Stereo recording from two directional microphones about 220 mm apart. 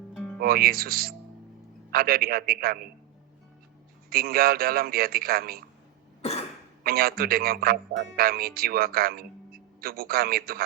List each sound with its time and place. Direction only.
0.3 s speech: 45° right (ahead or behind)
4.1 s speech: 45° right (ahead or behind)
6.8 s speech: 45° right (ahead or behind)